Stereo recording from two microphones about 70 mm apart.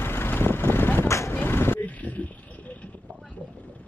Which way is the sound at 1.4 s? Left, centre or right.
Left.